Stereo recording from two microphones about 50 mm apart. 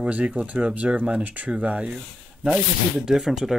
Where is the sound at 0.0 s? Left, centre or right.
Right.